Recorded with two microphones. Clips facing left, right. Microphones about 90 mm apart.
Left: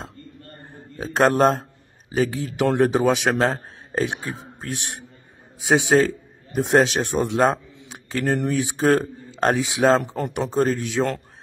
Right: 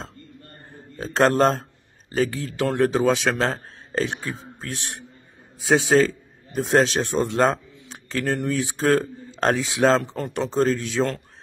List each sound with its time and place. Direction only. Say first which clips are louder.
0.9 s speech: even; 10° left (ahead or behind)